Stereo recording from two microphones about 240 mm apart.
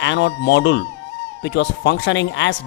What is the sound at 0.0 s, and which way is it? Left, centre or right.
Speech, left.